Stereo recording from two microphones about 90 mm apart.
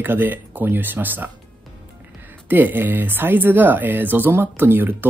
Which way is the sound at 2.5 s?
25° right (ahead or behind).